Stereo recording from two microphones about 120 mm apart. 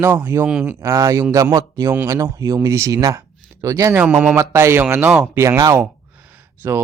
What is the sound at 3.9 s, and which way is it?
Speech, 15° right (ahead or behind).